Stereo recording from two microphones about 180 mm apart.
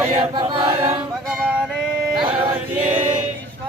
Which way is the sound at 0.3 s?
25° right (ahead or behind).